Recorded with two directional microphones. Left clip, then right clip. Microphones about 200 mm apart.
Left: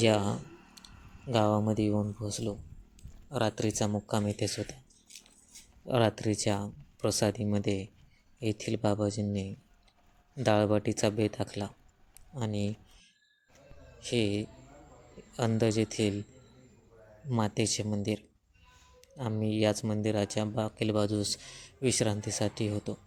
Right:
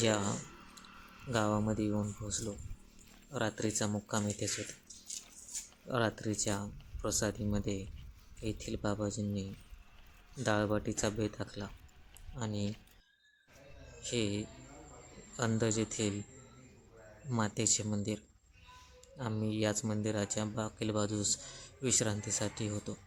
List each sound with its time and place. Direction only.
0.0 s clicking: 15° left (ahead or behind)
1.3 s speech: 15° left (ahead or behind)
5.9 s speech: 20° left (ahead or behind)
14.0 s speech: 15° left (ahead or behind)
17.2 s speech: 15° left (ahead or behind)